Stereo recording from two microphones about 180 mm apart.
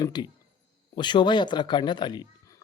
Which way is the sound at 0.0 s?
25° left (ahead or behind).